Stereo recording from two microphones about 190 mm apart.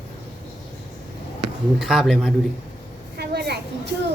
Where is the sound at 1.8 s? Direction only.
Centre (ahead or behind).